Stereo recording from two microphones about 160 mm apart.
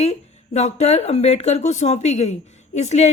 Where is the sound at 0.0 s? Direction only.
45° left (ahead or behind).